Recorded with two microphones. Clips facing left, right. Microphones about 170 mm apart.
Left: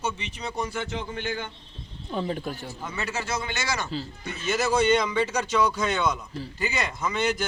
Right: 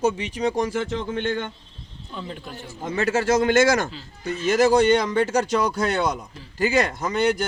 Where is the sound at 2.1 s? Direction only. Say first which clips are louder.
Left 6 dB; 45° left (ahead or behind).